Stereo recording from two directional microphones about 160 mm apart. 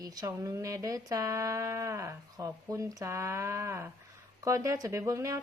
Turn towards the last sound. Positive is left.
turn(degrees=-20)  # may be behind; listen again after turning